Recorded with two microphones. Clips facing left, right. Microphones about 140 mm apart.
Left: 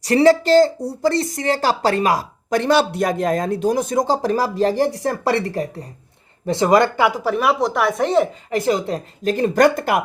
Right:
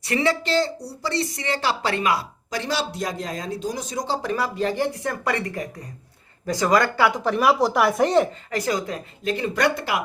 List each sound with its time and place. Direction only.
0.0 s speech: 35° left (ahead or behind)
7.1 s a woman's voice: centre (ahead or behind)
8.4 s speech: 25° left (ahead or behind)
9.2 s speech: 40° left (ahead or behind)